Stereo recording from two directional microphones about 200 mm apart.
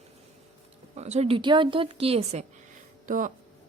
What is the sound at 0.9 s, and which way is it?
A woman's voice, 35° right (ahead or behind).